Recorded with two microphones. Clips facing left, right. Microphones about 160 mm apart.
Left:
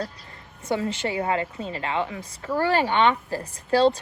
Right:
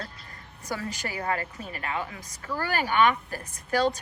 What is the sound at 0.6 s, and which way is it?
A woman's voice, 25° left (ahead or behind).